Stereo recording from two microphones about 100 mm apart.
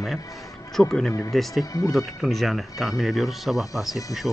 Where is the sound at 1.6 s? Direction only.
35° left (ahead or behind).